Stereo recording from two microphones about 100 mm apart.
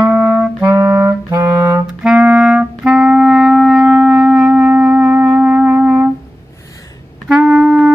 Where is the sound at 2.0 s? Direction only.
10° right (ahead or behind).